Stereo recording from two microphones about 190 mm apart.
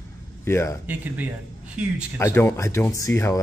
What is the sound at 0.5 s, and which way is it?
Speech, 15° left (ahead or behind).